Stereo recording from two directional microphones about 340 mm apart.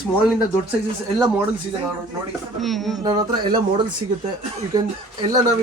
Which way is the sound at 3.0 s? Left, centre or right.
Centre.